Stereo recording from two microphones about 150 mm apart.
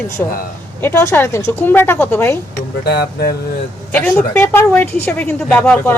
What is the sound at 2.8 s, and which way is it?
Speech, 90° left.